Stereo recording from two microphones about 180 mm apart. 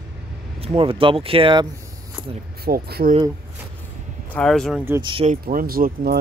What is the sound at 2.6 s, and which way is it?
Speech, 60° right (ahead or behind).